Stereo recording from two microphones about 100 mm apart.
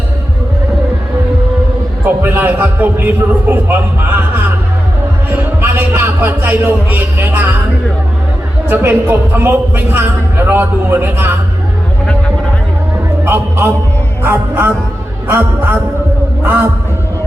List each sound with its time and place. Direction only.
2.2 s a man's voice: 20° right (ahead or behind)
5.6 s a man's voice: 20° right (ahead or behind)
8.7 s a man's voice: 20° right (ahead or behind)
13.2 s music: 20° right (ahead or behind)
14.3 s a man's voice: 20° right (ahead or behind)